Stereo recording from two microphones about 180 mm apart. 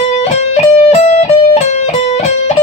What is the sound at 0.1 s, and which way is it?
Music, 40° left (ahead or behind).